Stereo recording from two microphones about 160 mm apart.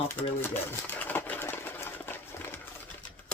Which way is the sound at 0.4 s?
10° left (ahead or behind).